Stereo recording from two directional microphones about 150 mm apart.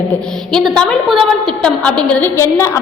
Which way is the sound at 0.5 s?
5° left (ahead or behind).